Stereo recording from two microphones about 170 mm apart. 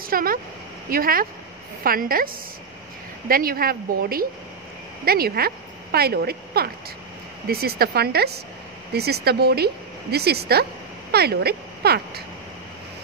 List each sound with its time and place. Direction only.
0.0 s a woman's voice: 60° right (ahead or behind)